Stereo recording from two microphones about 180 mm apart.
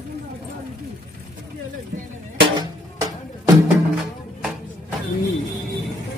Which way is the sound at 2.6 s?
20° right (ahead or behind).